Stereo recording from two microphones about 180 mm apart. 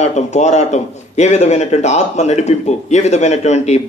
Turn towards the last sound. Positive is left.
turn(degrees=40)  # may be behind; listen again after turning